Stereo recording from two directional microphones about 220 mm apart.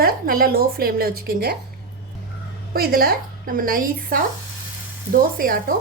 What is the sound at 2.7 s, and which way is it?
Speech, 40° right (ahead or behind).